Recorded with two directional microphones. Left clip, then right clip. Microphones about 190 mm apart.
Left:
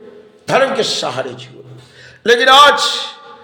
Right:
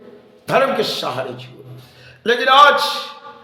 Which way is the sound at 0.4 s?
15° left (ahead or behind).